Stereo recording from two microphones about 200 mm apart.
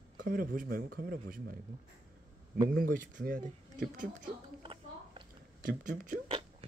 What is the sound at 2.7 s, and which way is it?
Speech, 45° right (ahead or behind).